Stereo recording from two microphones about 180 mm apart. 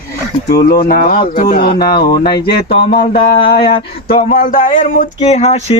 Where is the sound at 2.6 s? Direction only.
60° left (ahead or behind).